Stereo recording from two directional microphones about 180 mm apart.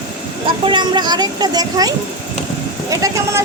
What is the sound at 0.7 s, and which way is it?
Speech, 25° right (ahead or behind).